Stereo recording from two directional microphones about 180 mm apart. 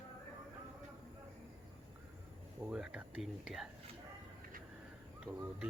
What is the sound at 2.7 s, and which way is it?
Speech, 5° right (ahead or behind).